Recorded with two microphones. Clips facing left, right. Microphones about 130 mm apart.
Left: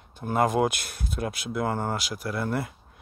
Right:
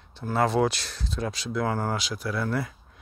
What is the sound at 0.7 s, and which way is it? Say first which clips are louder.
Speech: even; 55° left (ahead or behind).